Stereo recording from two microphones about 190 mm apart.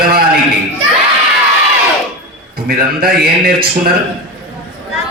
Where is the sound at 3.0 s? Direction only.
50° right (ahead or behind).